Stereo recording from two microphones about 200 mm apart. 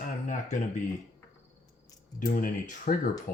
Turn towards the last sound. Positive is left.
turn(degrees=45)  # may be behind; listen again after turning